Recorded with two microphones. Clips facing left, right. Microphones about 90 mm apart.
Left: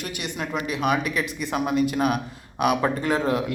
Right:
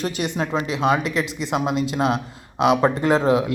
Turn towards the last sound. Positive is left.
turn(degrees=-20)  # may be behind; listen again after turning